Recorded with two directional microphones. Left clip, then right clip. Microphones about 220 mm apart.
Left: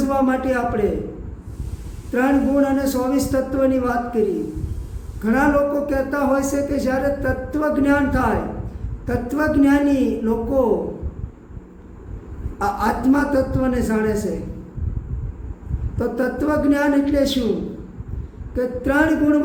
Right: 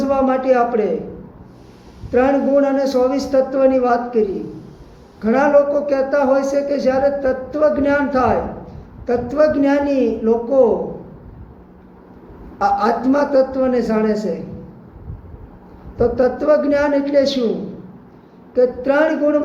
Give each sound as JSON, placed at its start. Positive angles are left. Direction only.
{"t": 0.0, "sound": "a man's voice", "side_deg": 15}
{"t": 2.1, "sound": "speech", "side_deg": 20}
{"t": 12.5, "sound": "speech", "side_deg": 20}
{"t": 16.0, "sound": "speech", "side_deg": 20}
{"t": 18.5, "sound": "speech", "side_deg": 15}